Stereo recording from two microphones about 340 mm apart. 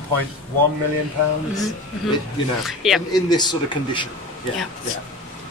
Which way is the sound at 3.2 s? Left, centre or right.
Centre.